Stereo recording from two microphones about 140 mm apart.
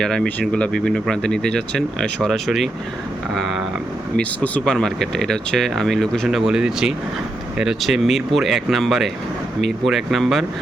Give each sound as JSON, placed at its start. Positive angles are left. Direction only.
{"t": 0.0, "sound": "speech", "side_deg": 5}
{"t": 4.2, "sound": "speech", "side_deg": 10}